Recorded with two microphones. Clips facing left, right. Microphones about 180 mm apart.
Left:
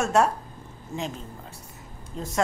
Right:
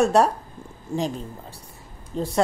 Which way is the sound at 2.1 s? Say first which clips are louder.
Right 8 dB; 30° right (ahead or behind).